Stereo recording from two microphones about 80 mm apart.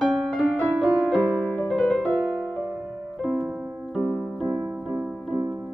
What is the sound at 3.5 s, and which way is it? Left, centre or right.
Music, centre.